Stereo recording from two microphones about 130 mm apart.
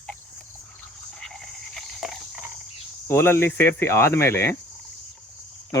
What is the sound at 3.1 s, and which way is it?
Speech, 20° left (ahead or behind).